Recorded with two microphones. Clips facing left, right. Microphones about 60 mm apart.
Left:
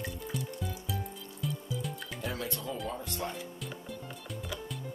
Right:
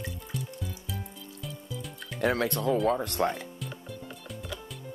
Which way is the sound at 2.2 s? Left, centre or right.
Right.